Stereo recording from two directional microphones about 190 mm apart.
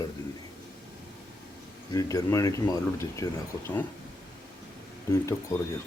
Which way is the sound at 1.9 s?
20° left (ahead or behind).